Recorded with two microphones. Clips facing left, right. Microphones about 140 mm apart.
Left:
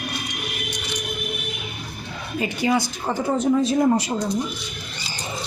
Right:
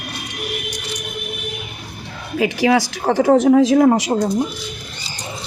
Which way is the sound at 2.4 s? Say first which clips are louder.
Right 6 dB; 90° right.